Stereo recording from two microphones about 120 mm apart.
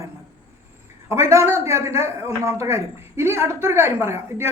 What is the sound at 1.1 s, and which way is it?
A woman's voice, 25° right (ahead or behind).